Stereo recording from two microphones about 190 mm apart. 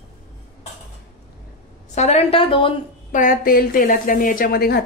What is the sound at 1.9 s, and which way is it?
Speech, 35° left (ahead or behind).